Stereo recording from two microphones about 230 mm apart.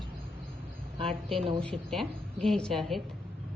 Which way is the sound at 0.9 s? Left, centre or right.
Right.